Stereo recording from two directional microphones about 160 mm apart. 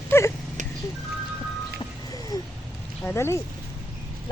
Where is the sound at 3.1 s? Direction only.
15° left (ahead or behind).